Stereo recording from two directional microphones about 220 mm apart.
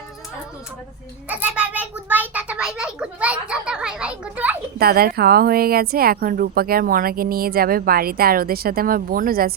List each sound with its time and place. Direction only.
1.3 s a child's voice: 5° right (ahead or behind)
4.8 s a woman's voice: 45° right (ahead or behind)